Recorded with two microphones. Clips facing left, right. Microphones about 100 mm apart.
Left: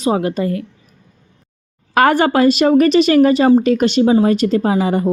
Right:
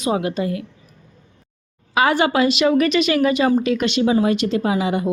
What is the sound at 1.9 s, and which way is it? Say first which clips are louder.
A woman's voice: left 4 dB; 50° left (ahead or behind).